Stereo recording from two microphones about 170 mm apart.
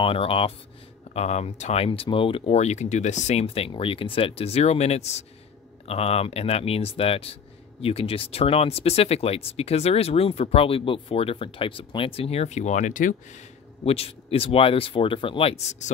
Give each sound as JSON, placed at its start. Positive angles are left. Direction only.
{"t": 0.0, "sound": "speech", "side_deg": 35}
{"t": 13.8, "sound": "speech", "side_deg": 35}